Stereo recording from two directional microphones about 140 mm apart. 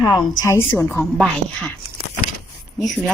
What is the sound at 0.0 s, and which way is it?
A woman's voice, 20° left (ahead or behind).